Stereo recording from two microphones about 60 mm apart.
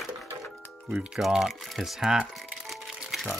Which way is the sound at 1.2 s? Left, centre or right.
Centre.